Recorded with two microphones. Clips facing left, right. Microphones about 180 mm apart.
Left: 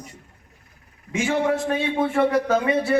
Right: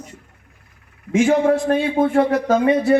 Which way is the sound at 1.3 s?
45° right (ahead or behind).